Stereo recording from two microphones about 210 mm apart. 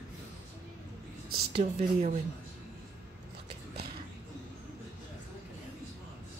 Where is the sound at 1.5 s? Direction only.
30° right (ahead or behind).